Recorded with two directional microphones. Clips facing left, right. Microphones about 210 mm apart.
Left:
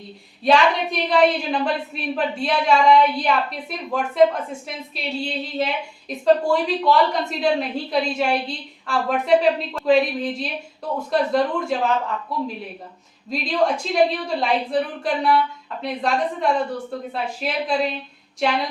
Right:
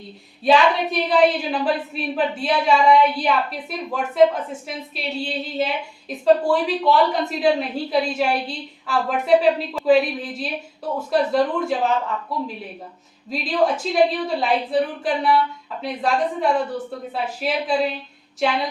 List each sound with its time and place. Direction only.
0.4 s a woman's voice: 5° right (ahead or behind)
13.3 s a woman's voice: 5° right (ahead or behind)